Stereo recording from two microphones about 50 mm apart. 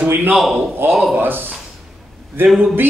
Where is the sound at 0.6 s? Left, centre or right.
Right.